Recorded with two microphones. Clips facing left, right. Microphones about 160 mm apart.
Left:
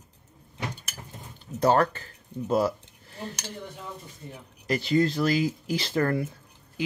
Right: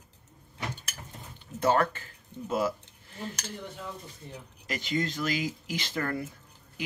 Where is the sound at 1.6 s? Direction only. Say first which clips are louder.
Left 3 dB; 35° left (ahead or behind).